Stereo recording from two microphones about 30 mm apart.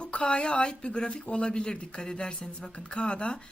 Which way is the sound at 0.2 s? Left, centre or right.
Left.